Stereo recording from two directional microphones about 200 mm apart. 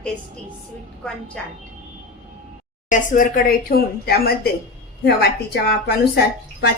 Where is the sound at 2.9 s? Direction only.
40° left (ahead or behind).